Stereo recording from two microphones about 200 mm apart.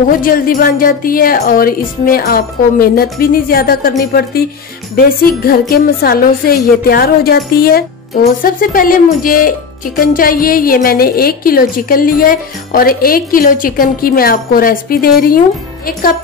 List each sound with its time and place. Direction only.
0.2 s a woman's voice: 45° left (ahead or behind)